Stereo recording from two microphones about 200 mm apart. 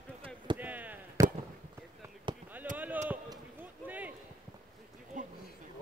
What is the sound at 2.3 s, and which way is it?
Basketball bounce, 25° right (ahead or behind).